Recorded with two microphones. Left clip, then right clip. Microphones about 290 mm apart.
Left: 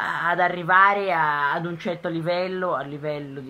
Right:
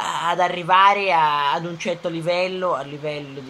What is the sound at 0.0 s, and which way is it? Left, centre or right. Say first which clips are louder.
A woman's voice: right 1 dB; centre.